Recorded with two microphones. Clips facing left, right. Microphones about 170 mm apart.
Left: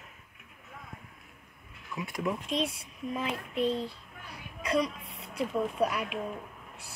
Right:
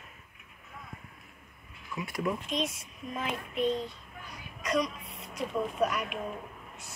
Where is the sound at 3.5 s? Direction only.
30° left (ahead or behind).